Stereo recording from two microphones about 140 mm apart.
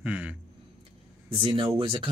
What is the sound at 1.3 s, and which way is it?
Speech, 40° right (ahead or behind).